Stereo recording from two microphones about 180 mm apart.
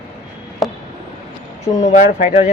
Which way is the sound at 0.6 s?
Centre (ahead or behind).